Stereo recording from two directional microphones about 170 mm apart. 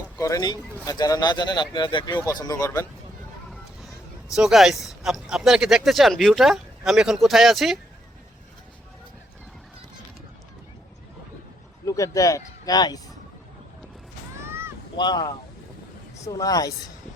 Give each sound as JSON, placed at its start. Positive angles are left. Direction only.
{"t": 0.2, "sound": "speech", "side_deg": 20}
{"t": 4.3, "sound": "speech", "side_deg": -5}
{"t": 11.9, "sound": "speech", "side_deg": 20}
{"t": 14.4, "sound": "a sound", "side_deg": -15}
{"t": 14.9, "sound": "speech", "side_deg": 25}